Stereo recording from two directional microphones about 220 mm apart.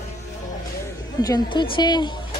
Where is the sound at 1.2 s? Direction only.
20° left (ahead or behind).